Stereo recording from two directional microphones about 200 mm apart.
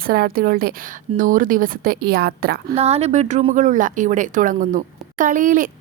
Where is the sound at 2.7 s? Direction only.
30° right (ahead or behind).